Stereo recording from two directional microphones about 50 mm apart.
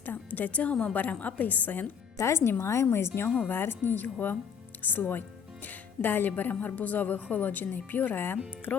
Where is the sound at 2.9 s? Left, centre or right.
Left.